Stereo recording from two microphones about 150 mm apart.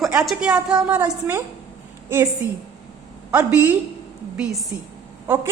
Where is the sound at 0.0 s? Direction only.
5° right (ahead or behind).